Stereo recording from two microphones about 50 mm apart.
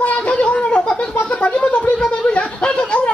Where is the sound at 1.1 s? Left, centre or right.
Left.